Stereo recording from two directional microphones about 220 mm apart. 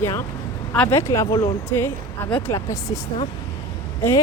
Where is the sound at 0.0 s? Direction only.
10° left (ahead or behind).